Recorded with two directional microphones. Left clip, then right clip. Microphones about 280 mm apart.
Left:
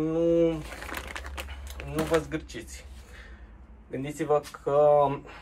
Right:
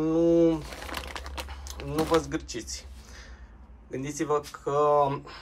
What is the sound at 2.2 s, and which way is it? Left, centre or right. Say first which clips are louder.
Speech: right 1 dB; centre.